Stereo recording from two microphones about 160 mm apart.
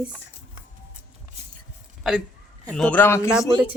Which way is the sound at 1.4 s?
40° right (ahead or behind).